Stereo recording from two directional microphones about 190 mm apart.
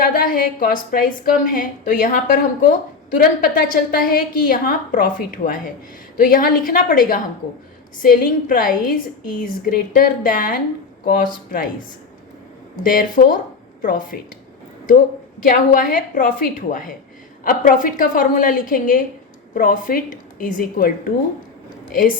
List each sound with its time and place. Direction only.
0.0 s a woman's voice: 45° left (ahead or behind)
12.7 s a woman's voice: 45° left (ahead or behind)
15.4 s a woman's voice: 45° left (ahead or behind)